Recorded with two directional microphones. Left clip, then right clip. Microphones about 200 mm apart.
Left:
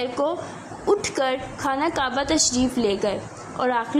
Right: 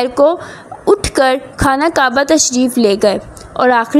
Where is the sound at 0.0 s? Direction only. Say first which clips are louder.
Right 13 dB; 30° right (ahead or behind).